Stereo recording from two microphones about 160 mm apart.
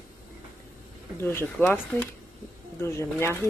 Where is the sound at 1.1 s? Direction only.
15° left (ahead or behind).